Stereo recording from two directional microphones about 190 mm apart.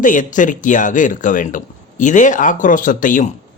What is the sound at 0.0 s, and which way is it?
A man's voice, 45° left (ahead or behind).